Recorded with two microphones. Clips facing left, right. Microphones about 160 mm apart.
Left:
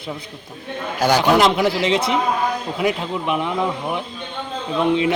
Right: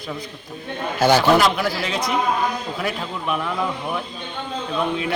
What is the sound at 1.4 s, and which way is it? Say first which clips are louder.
Speech: left 4 dB; 25° left (ahead or behind).